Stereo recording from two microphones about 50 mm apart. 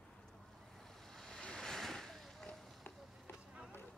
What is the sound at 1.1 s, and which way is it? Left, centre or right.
Waves, centre.